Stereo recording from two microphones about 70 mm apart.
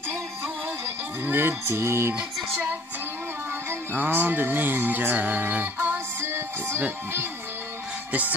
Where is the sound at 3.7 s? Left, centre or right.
Right.